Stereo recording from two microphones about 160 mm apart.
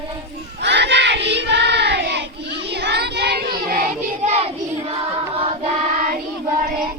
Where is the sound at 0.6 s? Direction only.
90° right; by 3.9 s 65° right (ahead or behind).